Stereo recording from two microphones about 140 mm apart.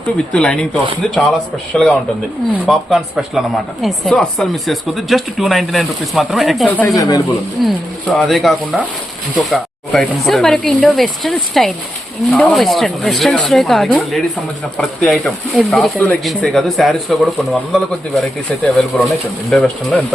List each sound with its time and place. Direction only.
0.3 s a man's voice: 5° left (ahead or behind)
6.8 s speech: 25° left (ahead or behind)
7.6 s a woman's voice: centre (ahead or behind)